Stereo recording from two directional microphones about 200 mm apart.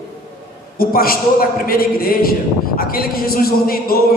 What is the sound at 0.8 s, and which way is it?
A man's voice, 50° left (ahead or behind).